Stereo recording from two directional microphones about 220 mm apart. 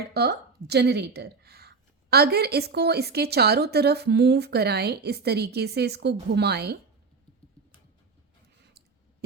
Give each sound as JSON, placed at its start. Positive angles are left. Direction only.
{"t": 0.1, "sound": "a woman's voice", "side_deg": -50}